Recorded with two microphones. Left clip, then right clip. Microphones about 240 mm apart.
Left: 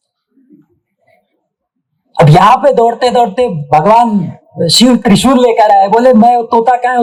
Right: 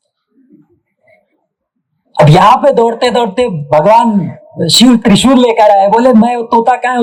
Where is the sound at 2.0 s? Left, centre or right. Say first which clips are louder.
Even; right.